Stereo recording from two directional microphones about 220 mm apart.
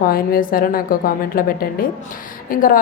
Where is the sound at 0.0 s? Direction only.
40° left (ahead or behind).